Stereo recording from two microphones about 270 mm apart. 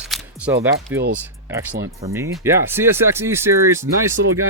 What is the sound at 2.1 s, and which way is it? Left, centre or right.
Speech, centre.